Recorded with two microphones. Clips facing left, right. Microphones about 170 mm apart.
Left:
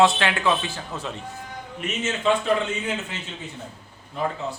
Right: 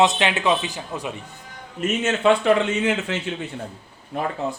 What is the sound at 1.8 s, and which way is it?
A man's voice, 60° right (ahead or behind).